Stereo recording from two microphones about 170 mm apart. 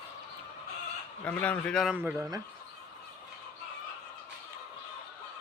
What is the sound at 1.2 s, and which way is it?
Speech, 10° left (ahead or behind).